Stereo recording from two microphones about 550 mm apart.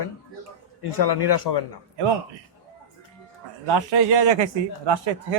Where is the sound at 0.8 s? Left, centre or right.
Left.